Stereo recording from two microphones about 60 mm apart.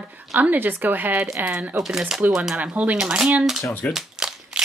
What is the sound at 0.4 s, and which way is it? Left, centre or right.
Speech, right.